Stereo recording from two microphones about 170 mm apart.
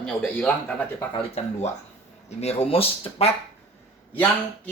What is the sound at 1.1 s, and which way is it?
Speech, 35° left (ahead or behind).